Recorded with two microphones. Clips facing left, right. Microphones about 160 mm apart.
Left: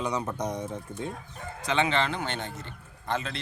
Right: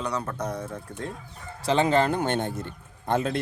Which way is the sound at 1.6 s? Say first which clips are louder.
Right 5 dB; 35° right (ahead or behind).